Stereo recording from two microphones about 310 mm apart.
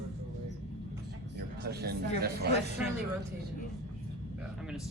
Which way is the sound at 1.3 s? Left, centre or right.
Right.